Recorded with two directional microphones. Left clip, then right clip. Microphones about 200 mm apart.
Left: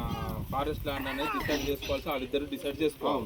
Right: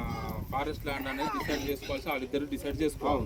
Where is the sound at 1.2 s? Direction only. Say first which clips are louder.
Left 2 dB; 35° left (ahead or behind).